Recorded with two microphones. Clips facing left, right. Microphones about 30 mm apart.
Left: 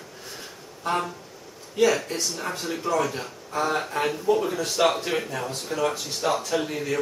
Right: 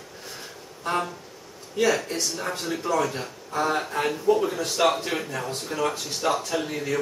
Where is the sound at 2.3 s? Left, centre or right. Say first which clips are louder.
Right 1 dB; centre.